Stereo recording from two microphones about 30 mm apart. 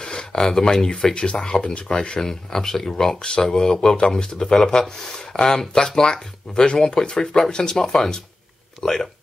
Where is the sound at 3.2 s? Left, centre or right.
Left.